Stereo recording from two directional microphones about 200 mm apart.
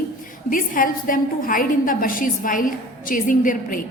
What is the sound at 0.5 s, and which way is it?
A woman's voice, 45° left (ahead or behind).